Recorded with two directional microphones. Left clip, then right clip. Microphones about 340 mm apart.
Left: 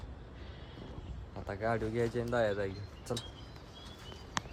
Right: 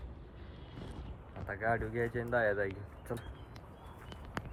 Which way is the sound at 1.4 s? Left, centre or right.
Centre.